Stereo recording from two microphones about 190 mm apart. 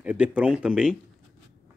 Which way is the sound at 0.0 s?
5° right (ahead or behind).